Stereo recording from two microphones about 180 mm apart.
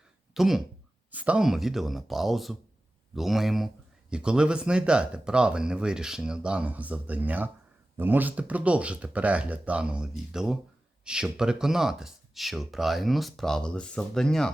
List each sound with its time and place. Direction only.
0.3 s speech: centre (ahead or behind)